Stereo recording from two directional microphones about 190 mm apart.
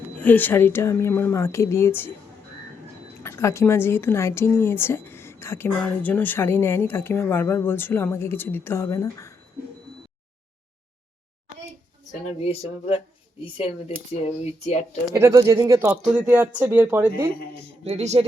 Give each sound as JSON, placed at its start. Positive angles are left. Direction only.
{"t": 0.2, "sound": "a woman's voice", "side_deg": 10}
{"t": 3.2, "sound": "a woman's voice", "side_deg": 15}
{"t": 12.2, "sound": "speech", "side_deg": 35}
{"t": 15.1, "sound": "speech", "side_deg": -15}
{"t": 17.8, "sound": "speech", "side_deg": -35}